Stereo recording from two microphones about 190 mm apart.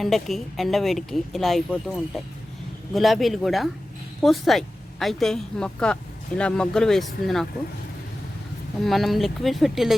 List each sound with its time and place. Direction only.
0.0 s speech: centre (ahead or behind)
8.8 s speech: centre (ahead or behind)